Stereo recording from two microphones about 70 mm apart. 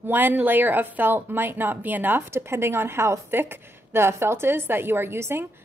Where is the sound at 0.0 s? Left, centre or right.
Right.